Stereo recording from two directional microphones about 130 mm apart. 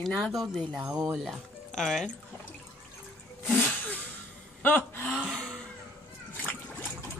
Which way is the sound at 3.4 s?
15° left (ahead or behind).